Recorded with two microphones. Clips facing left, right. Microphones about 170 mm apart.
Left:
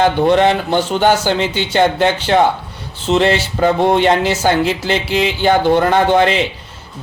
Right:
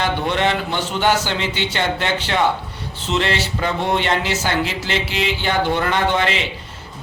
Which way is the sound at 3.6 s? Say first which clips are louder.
Left 10 dB; 40° left (ahead or behind).